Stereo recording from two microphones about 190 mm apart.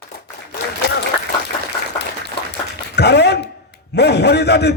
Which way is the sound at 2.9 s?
60° left (ahead or behind).